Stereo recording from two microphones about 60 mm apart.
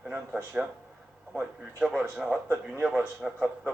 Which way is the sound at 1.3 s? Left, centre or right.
Centre.